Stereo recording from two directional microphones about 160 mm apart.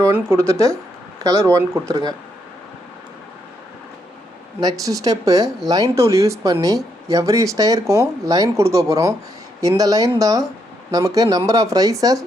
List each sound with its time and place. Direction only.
0.0 s speech: 15° right (ahead or behind)
4.6 s speech: 20° right (ahead or behind)